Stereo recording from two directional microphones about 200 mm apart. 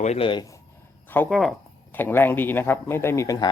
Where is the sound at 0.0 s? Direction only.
30° left (ahead or behind).